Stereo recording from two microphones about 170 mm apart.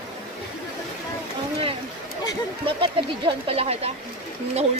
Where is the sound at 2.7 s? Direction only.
30° right (ahead or behind).